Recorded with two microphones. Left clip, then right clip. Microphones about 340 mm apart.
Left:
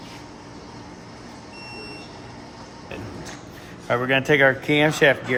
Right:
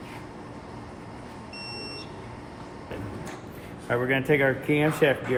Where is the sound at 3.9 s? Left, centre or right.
Left.